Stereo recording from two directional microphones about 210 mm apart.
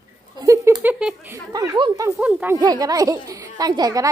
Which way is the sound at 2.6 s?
20° right (ahead or behind).